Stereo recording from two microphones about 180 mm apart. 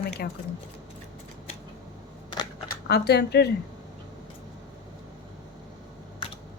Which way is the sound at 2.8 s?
65° left (ahead or behind).